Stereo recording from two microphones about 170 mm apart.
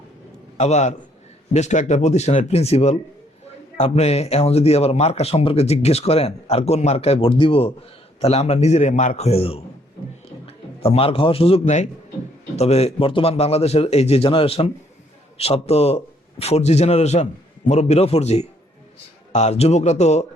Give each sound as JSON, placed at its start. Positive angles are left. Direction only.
{"t": 0.5, "sound": "a man's voice", "side_deg": 40}